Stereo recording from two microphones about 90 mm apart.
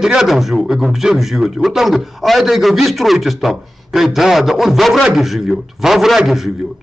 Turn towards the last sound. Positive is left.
turn(degrees=0)  # may be behind; listen again after turning